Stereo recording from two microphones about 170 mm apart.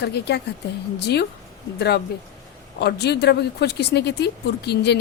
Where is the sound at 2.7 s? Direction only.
75° left (ahead or behind).